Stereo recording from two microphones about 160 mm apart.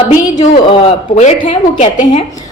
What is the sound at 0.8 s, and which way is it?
A woman's voice, 45° left (ahead or behind).